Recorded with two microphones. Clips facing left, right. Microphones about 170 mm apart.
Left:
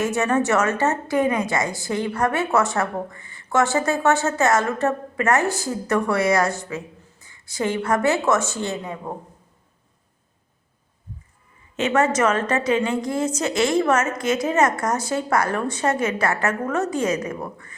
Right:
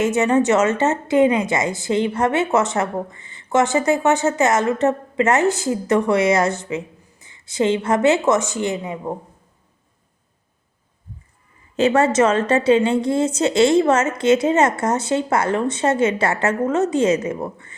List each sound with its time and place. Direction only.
0.0 s a woman's voice: 20° right (ahead or behind)
11.8 s a woman's voice: 30° right (ahead or behind)